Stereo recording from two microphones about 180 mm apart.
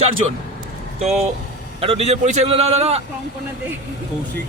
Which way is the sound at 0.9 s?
40° right (ahead or behind).